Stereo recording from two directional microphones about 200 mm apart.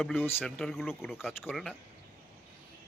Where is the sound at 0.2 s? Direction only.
10° left (ahead or behind).